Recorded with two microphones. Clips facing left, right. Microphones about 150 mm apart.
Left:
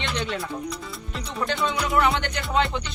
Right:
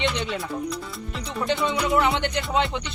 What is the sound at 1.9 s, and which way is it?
Music, 25° right (ahead or behind).